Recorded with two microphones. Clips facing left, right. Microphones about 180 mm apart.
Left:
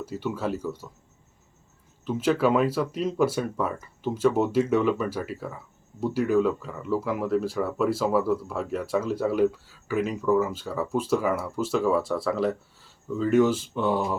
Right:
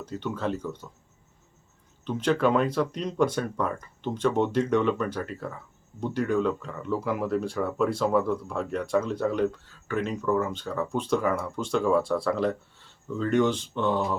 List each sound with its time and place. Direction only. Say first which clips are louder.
0.0 s speech: left 1 dB; 5° left (ahead or behind)
2.0 s speech: left 1 dB; 5° left (ahead or behind)